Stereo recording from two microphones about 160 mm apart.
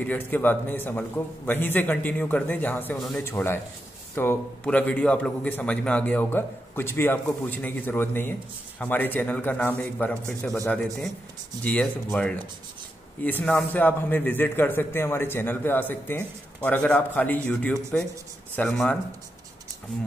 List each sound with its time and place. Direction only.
0.0 s a man's voice: 10° left (ahead or behind)